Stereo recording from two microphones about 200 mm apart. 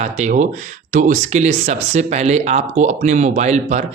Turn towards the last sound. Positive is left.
turn(degrees=-35)  # may be behind; listen again after turning